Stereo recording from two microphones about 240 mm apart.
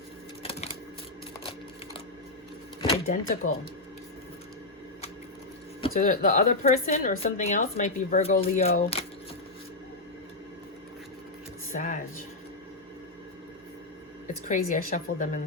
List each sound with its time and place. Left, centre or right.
3.1 s a woman's voice: left
5.9 s a woman's voice: left
11.7 s a sound: left
14.4 s a woman's voice: left